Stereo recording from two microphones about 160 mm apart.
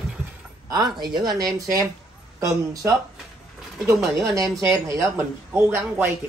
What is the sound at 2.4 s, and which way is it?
Speech, 20° right (ahead or behind).